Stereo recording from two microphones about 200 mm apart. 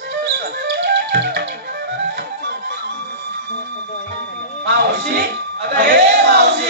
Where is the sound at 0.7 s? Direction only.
60° right (ahead or behind).